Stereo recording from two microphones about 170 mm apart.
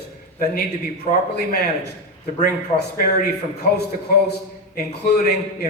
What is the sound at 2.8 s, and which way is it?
A man's voice, 75° left (ahead or behind).